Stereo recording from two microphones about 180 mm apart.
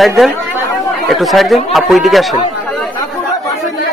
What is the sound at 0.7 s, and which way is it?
Chatter, centre (ahead or behind).